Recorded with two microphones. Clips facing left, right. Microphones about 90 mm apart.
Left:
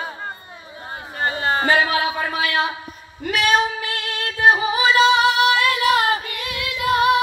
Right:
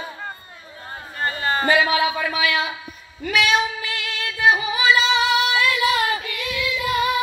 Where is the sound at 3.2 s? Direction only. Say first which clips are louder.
Left 1 dB; 45° left (ahead or behind).